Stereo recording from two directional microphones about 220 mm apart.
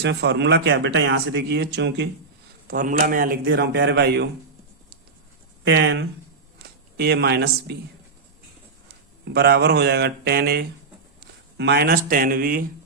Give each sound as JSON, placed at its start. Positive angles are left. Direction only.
{"t": 0.0, "sound": "speech", "side_deg": -50}
{"t": 2.6, "sound": "speech", "side_deg": -40}
{"t": 5.6, "sound": "speech", "side_deg": -55}
{"t": 9.3, "sound": "speech", "side_deg": -45}